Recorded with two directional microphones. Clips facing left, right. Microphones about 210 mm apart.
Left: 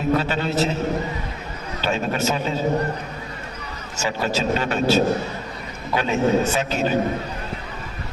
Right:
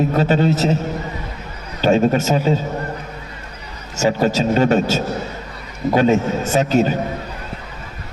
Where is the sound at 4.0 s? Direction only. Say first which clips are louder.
Right 7 dB; 45° right (ahead or behind).